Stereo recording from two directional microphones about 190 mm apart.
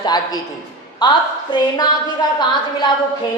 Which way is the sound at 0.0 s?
20° left (ahead or behind).